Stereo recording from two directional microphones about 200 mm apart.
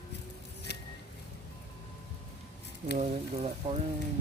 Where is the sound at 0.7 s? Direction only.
55° left (ahead or behind).